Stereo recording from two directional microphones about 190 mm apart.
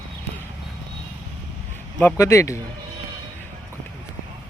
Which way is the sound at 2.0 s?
15° left (ahead or behind).